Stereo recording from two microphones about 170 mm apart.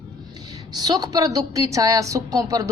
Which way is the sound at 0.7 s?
25° right (ahead or behind).